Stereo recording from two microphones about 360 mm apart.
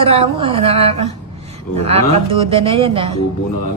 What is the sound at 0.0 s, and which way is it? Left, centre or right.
Speech, centre.